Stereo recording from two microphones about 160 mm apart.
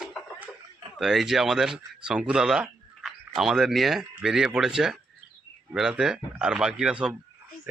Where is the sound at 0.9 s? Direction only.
Centre (ahead or behind).